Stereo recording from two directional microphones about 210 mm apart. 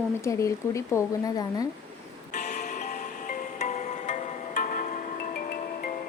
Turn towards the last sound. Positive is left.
turn(degrees=45)  # may be behind; listen again after turning